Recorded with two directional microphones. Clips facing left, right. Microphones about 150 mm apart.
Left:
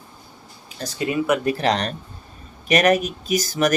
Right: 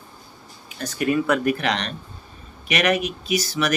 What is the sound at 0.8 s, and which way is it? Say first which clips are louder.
Speech: even; 35° left (ahead or behind).